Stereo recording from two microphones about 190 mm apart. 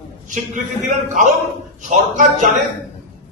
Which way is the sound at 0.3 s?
40° right (ahead or behind).